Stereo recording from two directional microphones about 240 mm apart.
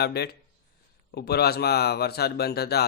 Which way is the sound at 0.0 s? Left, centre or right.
Left.